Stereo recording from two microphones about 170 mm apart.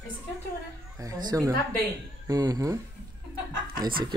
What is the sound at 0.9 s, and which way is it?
Speech, 20° right (ahead or behind).